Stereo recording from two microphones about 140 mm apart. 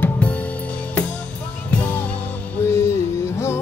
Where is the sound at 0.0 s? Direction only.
10° left (ahead or behind).